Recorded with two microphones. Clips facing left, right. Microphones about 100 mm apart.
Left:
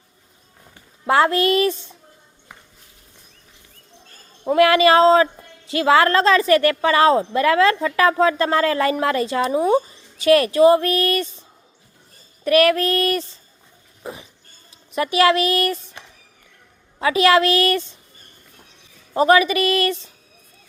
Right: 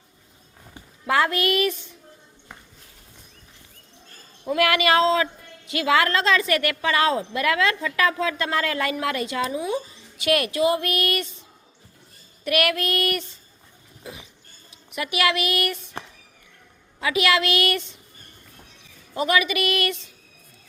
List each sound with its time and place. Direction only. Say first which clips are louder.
1.0 s a woman's voice: left 5 dB; 30° left (ahead or behind)
4.4 s a woman's voice: left 7 dB; 30° left (ahead or behind)
12.5 s a woman's voice: left 7 dB; 35° left (ahead or behind)
14.0 s a sound: left 6 dB; 40° left (ahead or behind)
14.9 s a woman's voice: left 7 dB; 35° left (ahead or behind)
17.0 s a woman's voice: left 6 dB; 35° left (ahead or behind)
19.1 s a woman's voice: left 7 dB; 35° left (ahead or behind)